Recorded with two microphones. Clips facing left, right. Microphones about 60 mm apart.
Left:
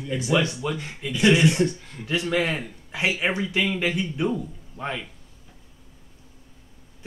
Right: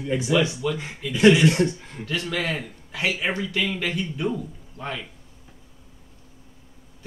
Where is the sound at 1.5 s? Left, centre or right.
Right.